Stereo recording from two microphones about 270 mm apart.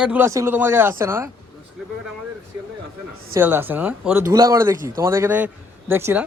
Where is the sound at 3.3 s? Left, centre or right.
Centre.